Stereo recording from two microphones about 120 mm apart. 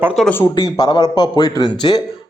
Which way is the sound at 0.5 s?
35° left (ahead or behind).